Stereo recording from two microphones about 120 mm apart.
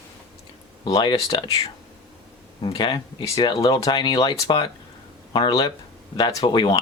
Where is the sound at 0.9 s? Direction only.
40° left (ahead or behind).